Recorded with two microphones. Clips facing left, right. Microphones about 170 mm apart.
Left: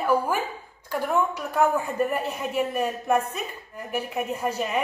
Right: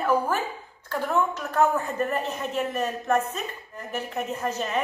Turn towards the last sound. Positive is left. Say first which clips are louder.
# left 1 dB
turn(degrees=10)  # may be behind; listen again after turning